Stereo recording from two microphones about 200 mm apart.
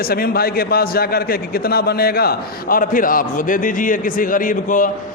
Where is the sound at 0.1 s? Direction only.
50° left (ahead or behind).